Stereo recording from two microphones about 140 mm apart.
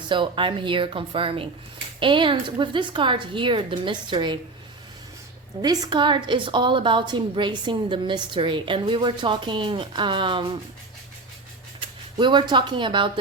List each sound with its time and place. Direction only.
0.1 s a woman's voice: 35° right (ahead or behind)
5.6 s a woman's voice: 30° right (ahead or behind)
11.8 s speech: 35° right (ahead or behind)